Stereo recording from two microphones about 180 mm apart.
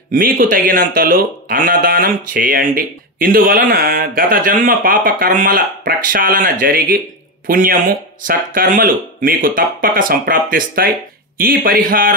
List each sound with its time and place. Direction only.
0.1 s speech: 50° right (ahead or behind)